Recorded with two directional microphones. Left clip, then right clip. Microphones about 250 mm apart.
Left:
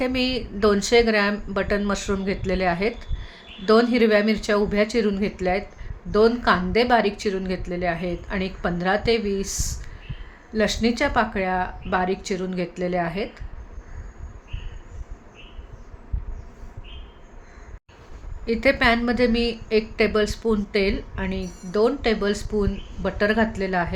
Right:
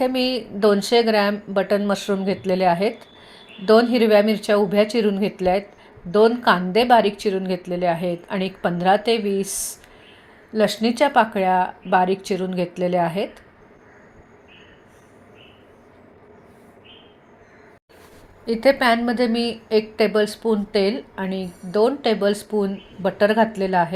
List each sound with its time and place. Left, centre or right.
0.0 s a woman's voice: centre
18.4 s a woman's voice: centre